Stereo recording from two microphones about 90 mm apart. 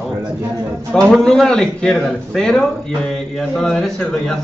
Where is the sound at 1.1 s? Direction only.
5° left (ahead or behind).